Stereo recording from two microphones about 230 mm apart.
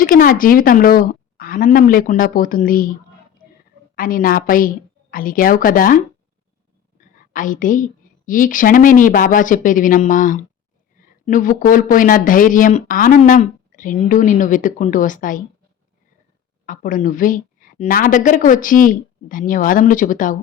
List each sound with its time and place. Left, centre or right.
0.0 s speech: left
3.9 s speech: left
7.0 s a sound: left
8.3 s speech: left
16.6 s speech: left